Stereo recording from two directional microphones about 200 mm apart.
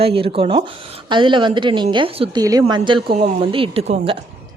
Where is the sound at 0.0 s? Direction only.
30° right (ahead or behind).